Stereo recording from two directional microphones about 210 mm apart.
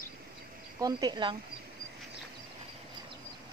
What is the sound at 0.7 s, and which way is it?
Speech, 20° right (ahead or behind).